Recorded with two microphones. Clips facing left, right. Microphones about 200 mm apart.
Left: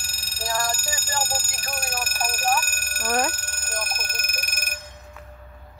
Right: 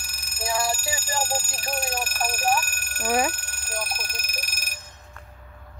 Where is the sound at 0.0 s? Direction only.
30° left (ahead or behind).